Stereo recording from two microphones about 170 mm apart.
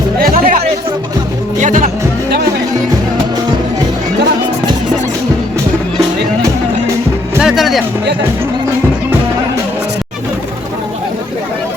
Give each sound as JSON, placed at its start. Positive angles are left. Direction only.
{"t": 0.2, "sound": "music", "side_deg": -55}
{"t": 7.3, "sound": "music", "side_deg": 0}